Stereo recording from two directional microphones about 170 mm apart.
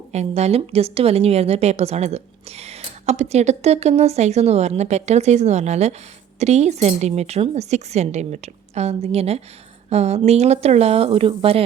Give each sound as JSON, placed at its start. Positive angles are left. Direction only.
{"t": 0.1, "sound": "a woman's voice", "side_deg": -40}